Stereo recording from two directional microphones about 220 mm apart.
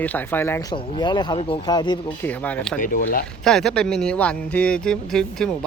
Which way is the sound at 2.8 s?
40° left (ahead or behind).